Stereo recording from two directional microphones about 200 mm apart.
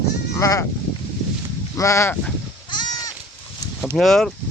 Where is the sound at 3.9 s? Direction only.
Centre (ahead or behind).